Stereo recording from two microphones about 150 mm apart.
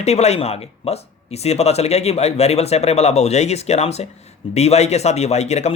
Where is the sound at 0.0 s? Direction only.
45° left (ahead or behind).